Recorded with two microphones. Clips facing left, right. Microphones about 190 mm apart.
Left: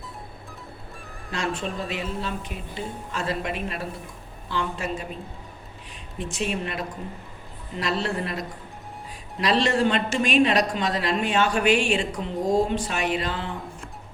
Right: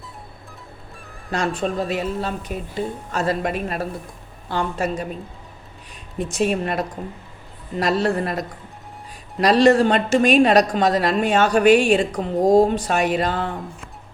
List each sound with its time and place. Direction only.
1.3 s speech: 40° right (ahead or behind)
6.1 s a woman's voice: 45° right (ahead or behind)